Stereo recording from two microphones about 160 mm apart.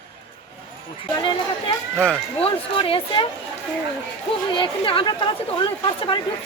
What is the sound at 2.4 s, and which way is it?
Speech, 35° left (ahead or behind).